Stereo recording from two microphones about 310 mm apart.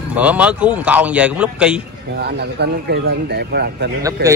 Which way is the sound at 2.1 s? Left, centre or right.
Right.